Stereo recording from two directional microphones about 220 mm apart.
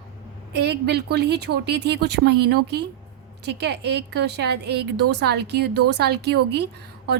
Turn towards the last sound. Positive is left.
turn(degrees=-50)  # may be behind; listen again after turning